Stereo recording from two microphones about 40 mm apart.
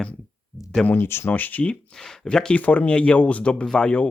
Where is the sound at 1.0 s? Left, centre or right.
Left.